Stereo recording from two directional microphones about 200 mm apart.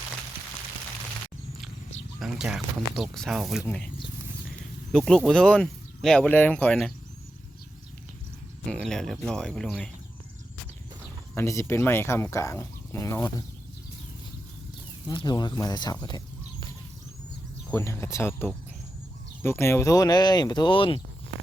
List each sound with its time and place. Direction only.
2.1 s speech: 5° right (ahead or behind)
4.9 s speech: 5° left (ahead or behind)
8.6 s speech: 5° left (ahead or behind)
11.3 s speech: 15° left (ahead or behind)
15.0 s speech: 20° left (ahead or behind)